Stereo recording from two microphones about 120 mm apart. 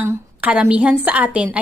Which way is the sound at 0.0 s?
15° right (ahead or behind).